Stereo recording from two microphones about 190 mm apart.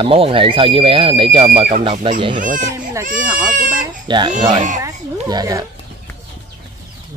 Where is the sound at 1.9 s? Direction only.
30° right (ahead or behind).